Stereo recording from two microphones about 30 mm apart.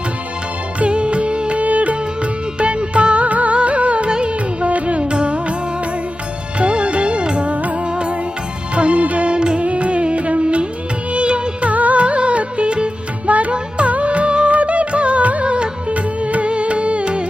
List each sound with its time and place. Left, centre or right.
0.8 s music: right
1.6 s music: right
3.2 s music: right
6.6 s music: right
7.5 s music: right
7.9 s music: right
11.7 s music: right
12.0 s music: right
13.2 s music: right
13.5 s music: right
15.2 s music: right
15.4 s music: right
15.9 s music: right